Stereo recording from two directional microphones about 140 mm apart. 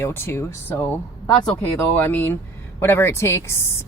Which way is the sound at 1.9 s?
15° left (ahead or behind).